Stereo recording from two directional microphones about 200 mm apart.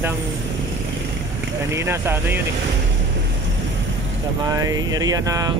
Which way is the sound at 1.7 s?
15° right (ahead or behind).